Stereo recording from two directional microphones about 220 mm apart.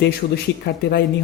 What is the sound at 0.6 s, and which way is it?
Speech, 45° left (ahead or behind).